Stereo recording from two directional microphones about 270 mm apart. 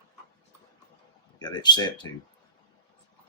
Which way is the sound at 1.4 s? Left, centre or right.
Centre.